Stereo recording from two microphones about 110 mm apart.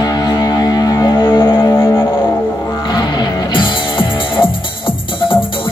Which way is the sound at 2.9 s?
40° left (ahead or behind).